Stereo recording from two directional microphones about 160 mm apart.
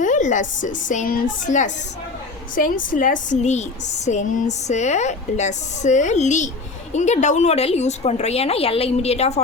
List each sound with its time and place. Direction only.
0.0 s a woman's voice: 50° left (ahead or behind)